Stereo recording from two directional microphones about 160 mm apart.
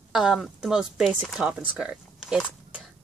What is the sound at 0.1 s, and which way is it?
Speech, centre (ahead or behind).